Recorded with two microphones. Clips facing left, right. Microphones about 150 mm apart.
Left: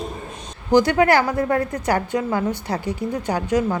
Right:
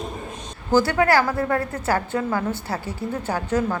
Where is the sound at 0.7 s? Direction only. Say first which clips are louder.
Left 2 dB; 20° left (ahead or behind).